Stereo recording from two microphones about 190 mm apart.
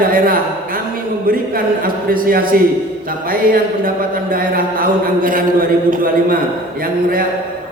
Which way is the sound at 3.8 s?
50° right (ahead or behind).